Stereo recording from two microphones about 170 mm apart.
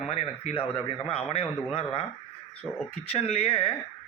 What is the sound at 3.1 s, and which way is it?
Speech, 35° left (ahead or behind).